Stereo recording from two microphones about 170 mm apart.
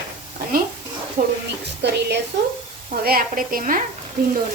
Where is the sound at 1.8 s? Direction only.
90° right.